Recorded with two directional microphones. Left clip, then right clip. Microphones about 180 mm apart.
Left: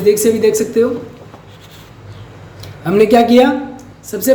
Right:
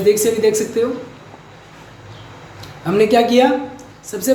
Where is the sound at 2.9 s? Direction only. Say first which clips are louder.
Left 4 dB; 20° left (ahead or behind).